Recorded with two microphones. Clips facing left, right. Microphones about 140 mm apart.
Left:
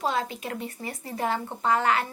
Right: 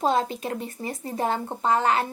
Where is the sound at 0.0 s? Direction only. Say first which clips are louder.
Right 5 dB; 30° right (ahead or behind).